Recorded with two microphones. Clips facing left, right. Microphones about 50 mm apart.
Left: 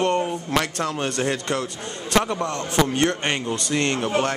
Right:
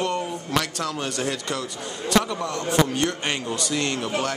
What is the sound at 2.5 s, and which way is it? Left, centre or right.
A man's voice, left.